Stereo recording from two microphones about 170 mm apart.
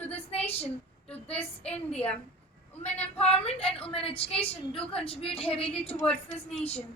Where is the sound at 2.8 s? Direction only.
40° left (ahead or behind).